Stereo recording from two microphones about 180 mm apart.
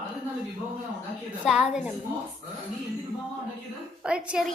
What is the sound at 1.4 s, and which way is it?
Speech, 5° right (ahead or behind).